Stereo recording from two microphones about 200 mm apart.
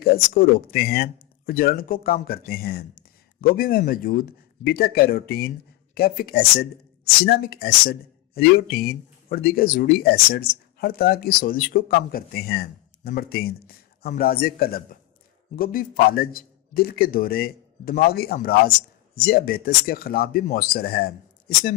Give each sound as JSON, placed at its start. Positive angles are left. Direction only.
{"t": 0.0, "sound": "speech", "side_deg": 50}